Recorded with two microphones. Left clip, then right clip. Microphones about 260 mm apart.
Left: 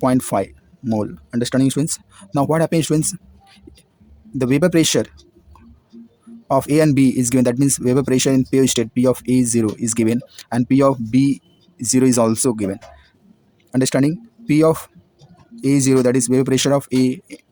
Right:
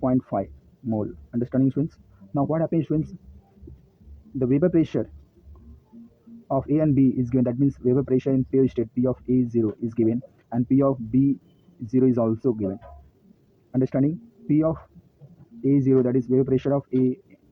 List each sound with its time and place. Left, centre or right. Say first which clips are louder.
0.0 s speech: left 7 dB; left
4.4 s speech: left 5 dB; left
6.5 s speech: left 7 dB; left